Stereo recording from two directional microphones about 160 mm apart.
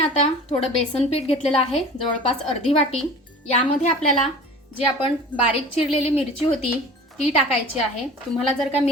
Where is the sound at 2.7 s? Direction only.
40° left (ahead or behind).